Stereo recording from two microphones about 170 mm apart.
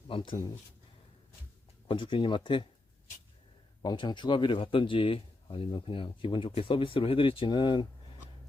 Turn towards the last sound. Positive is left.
turn(degrees=30)  # may be behind; listen again after turning